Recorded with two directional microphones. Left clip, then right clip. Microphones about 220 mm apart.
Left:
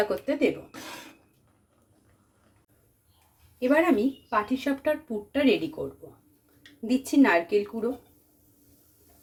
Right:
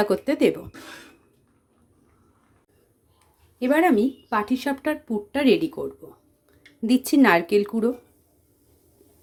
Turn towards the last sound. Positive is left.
turn(degrees=-45)  # may be behind; listen again after turning